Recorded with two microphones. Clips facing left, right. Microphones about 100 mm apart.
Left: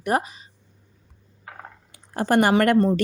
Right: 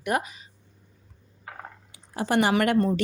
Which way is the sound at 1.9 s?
50° left (ahead or behind).